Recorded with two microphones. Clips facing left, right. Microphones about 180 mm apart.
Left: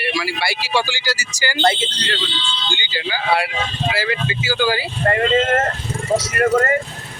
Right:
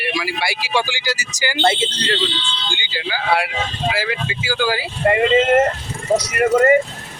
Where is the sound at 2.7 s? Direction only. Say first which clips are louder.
Even; 10° right (ahead or behind).